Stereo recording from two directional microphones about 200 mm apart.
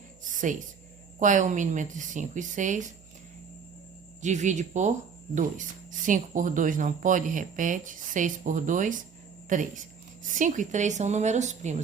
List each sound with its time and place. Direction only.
1.2 s speech: 40° right (ahead or behind)
4.2 s speech: 35° right (ahead or behind)